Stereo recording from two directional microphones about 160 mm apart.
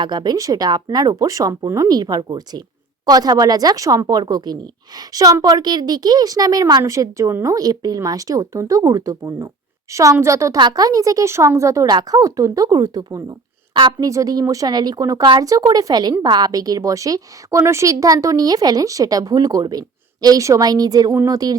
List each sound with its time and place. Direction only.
0.0 s a woman's voice: 25° right (ahead or behind)